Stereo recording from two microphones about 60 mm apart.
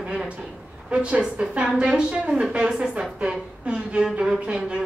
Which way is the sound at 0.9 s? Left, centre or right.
Right.